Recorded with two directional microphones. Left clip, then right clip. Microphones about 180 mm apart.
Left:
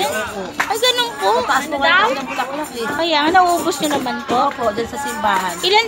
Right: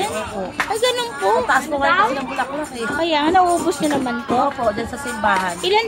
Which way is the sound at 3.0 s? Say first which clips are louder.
Left 2 dB; 20° right (ahead or behind).